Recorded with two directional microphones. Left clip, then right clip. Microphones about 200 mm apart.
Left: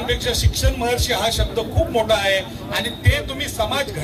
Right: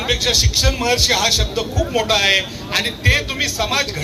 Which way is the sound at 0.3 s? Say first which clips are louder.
Right 6 dB; 55° left (ahead or behind).